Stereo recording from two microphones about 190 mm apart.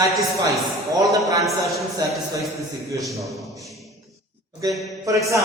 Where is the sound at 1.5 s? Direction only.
Centre (ahead or behind).